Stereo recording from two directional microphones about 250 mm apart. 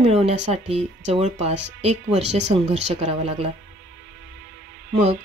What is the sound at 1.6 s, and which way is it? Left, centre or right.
Speech, right.